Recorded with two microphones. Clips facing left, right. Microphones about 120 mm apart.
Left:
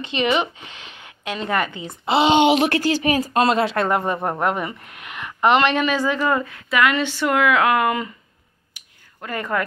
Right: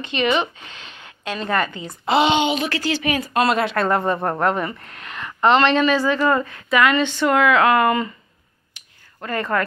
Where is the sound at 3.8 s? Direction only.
15° left (ahead or behind).